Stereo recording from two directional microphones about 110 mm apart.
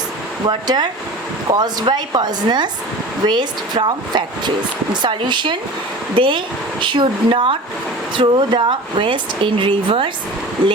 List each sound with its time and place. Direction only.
0.4 s a woman's voice: 40° right (ahead or behind)